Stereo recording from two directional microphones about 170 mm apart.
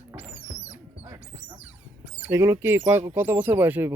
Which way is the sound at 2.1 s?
10° right (ahead or behind).